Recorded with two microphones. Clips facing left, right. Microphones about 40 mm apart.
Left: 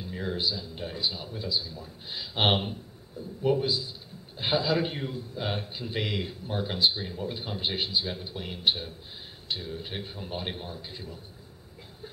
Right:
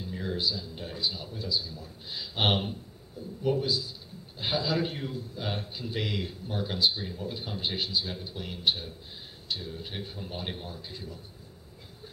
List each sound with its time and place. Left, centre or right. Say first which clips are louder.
0.0 s a man's voice: left 1 dB; centre